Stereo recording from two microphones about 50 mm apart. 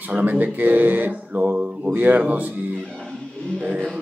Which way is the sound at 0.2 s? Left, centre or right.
Right.